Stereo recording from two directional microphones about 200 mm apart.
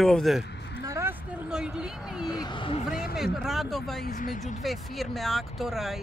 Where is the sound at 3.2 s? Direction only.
Centre (ahead or behind).